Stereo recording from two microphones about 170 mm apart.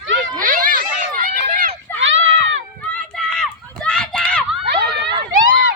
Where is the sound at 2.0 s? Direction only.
90° right.